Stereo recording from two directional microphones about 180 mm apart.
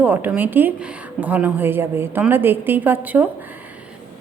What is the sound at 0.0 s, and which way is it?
A woman's voice, 10° right (ahead or behind).